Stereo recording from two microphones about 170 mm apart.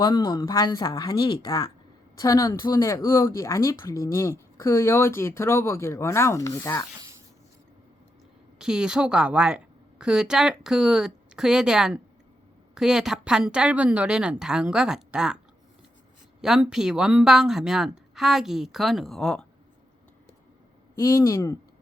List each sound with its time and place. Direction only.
0.0 s speech: 25° left (ahead or behind)
6.9 s a sound: 20° right (ahead or behind)
8.5 s speech: 5° right (ahead or behind)
16.4 s speech: 5° right (ahead or behind)
20.9 s speech: 15° left (ahead or behind)